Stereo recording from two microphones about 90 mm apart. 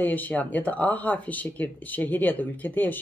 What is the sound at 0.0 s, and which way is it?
Speech, 20° left (ahead or behind).